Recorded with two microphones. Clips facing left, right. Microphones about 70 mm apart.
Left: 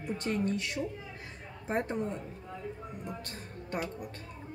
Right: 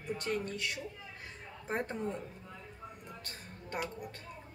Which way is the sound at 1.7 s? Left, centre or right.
Centre.